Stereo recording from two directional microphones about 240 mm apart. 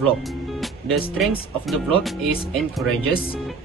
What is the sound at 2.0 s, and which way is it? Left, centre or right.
Speech, centre.